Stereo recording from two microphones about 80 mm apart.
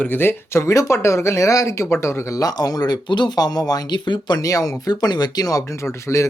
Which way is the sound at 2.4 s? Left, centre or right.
Left.